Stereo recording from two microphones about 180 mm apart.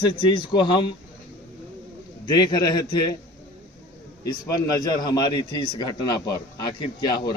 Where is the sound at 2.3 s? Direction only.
25° left (ahead or behind).